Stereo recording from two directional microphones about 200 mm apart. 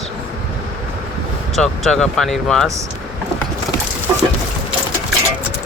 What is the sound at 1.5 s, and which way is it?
Speech, centre (ahead or behind).